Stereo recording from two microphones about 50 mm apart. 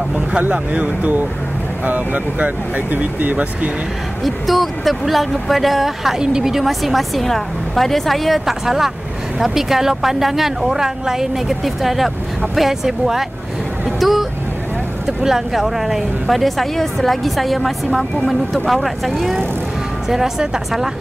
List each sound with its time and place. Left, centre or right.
0.4 s speech: right
4.2 s speech: centre
13.8 s vehicle: centre
15.0 s speech: centre
20.1 s speech: centre